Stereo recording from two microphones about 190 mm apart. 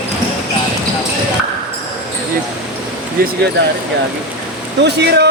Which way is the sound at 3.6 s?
60° right (ahead or behind).